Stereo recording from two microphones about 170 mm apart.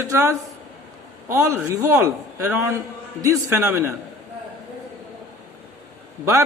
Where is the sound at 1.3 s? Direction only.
15° right (ahead or behind).